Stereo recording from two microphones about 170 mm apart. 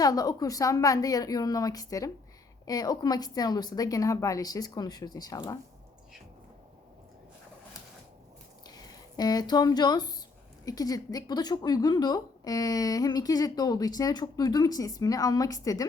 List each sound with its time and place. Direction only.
0.0 s a woman's voice: 20° left (ahead or behind)
8.6 s a woman's voice: 25° left (ahead or behind)